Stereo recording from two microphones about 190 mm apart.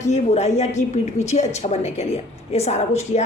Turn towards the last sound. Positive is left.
turn(degrees=35)  # may be behind; listen again after turning